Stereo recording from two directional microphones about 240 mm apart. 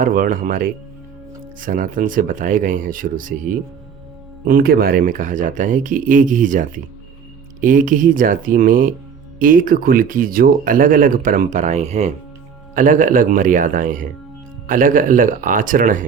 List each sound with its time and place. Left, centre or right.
0.0 s speech: right